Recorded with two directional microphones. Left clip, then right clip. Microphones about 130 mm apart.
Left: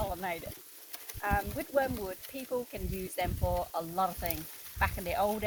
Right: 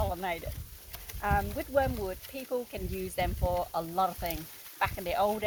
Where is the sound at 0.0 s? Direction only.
20° right (ahead or behind).